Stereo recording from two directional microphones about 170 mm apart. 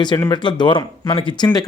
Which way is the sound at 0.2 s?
25° left (ahead or behind).